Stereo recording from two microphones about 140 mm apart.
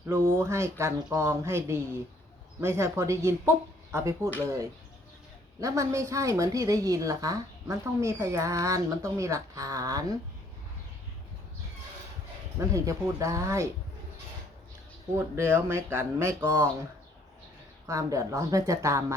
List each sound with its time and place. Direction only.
0.1 s a woman's voice: 20° right (ahead or behind)
5.5 s a woman's voice: 25° right (ahead or behind)
12.5 s a woman's voice: 25° right (ahead or behind)
15.1 s a woman's voice: 20° right (ahead or behind)
17.8 s a woman's voice: 25° right (ahead or behind)